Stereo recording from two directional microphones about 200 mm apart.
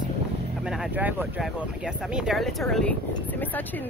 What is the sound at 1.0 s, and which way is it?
Speech, 10° right (ahead or behind).